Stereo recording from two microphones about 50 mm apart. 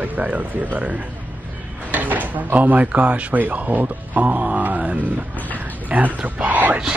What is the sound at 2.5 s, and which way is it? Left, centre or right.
Speech, right.